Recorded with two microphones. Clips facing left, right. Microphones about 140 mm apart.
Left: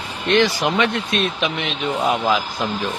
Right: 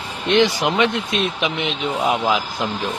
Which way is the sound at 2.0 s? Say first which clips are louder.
Even; 5° right (ahead or behind).